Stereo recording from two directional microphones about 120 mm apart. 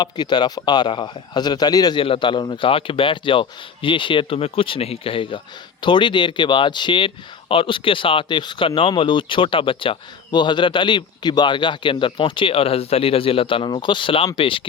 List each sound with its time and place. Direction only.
0.0 s a man's voice: 40° left (ahead or behind)
2.0 s speech: 45° left (ahead or behind)